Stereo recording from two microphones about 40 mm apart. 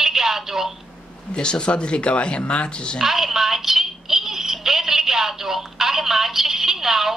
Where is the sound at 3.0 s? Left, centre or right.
Centre.